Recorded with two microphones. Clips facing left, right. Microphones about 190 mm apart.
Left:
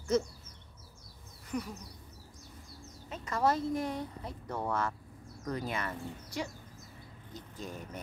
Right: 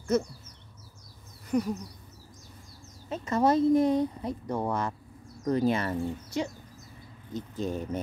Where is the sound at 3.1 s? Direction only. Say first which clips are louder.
Right 6 dB; 25° right (ahead or behind).